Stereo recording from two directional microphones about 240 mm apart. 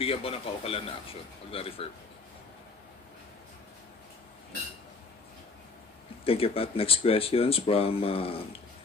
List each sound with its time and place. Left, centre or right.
0.0 s speech: left
6.2 s speech: left